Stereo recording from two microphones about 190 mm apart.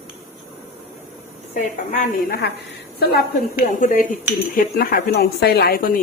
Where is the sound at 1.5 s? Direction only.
45° left (ahead or behind).